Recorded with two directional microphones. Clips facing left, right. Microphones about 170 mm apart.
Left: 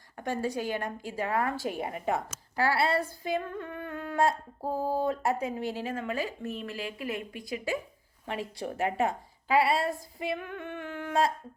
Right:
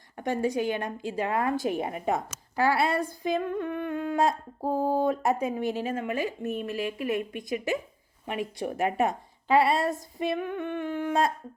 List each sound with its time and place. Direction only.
0.2 s speech: 20° right (ahead or behind)
4.6 s a sound: 55° right (ahead or behind)
5.0 s a woman's voice: 20° right (ahead or behind)